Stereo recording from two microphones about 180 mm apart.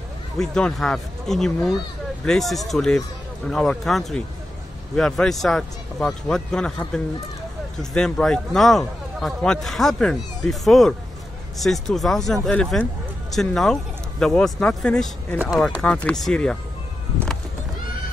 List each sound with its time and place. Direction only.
0.4 s speech: 5° left (ahead or behind)